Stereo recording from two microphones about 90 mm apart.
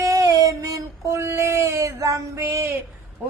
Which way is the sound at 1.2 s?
30° right (ahead or behind).